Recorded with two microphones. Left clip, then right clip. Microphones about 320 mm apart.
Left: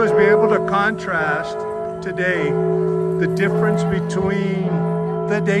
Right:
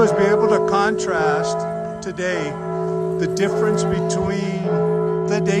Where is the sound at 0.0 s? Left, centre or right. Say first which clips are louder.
Left 2 dB; centre.